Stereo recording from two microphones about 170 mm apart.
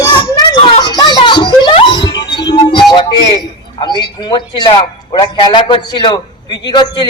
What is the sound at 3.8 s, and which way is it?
A man's voice, 25° left (ahead or behind).